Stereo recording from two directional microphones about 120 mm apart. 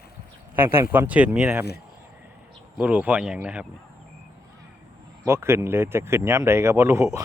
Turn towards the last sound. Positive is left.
turn(degrees=-20)  # may be behind; listen again after turning